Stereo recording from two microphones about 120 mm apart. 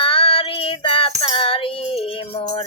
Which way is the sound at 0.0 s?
50° left (ahead or behind).